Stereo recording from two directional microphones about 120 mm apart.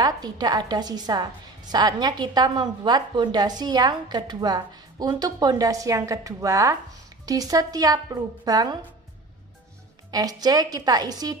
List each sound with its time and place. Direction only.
0.0 s a woman's voice: 35° right (ahead or behind)
10.1 s a woman's voice: 30° right (ahead or behind)